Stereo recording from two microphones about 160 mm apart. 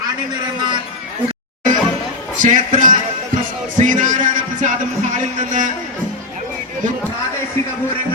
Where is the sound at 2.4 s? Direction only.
55° right (ahead or behind).